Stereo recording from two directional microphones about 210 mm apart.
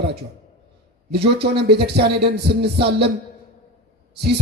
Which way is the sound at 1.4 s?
50° right (ahead or behind).